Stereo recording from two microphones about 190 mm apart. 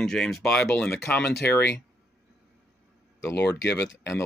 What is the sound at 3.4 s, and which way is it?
Speech, 65° left (ahead or behind).